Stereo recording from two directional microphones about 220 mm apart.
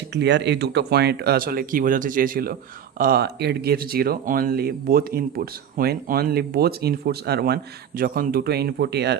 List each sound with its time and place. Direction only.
0.1 s speech: 50° right (ahead or behind)